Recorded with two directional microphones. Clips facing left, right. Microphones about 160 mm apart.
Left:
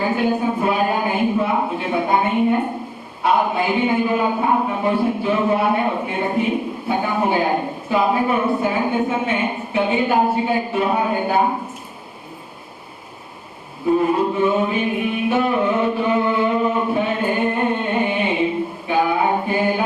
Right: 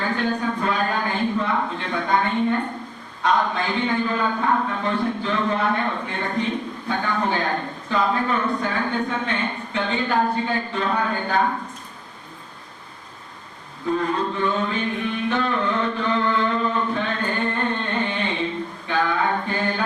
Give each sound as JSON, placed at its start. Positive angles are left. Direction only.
{"t": 0.0, "sound": "a man's voice", "side_deg": 10}
{"t": 13.8, "sound": "music", "side_deg": 10}